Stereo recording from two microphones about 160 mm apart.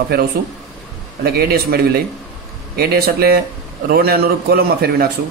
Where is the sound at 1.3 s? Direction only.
75° right (ahead or behind).